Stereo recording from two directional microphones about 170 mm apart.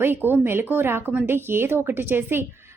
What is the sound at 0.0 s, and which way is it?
Speech, 10° right (ahead or behind).